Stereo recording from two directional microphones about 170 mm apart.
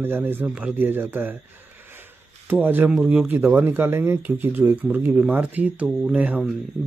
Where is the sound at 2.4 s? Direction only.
10° right (ahead or behind).